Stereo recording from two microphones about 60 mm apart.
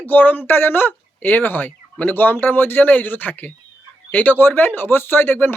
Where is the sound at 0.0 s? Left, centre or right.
Left.